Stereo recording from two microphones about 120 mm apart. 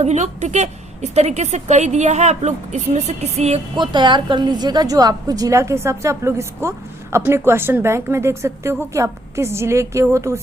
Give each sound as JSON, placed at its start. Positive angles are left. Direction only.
{"t": 0.0, "sound": "a woman's voice", "side_deg": -70}
{"t": 3.8, "sound": "a woman's voice", "side_deg": -40}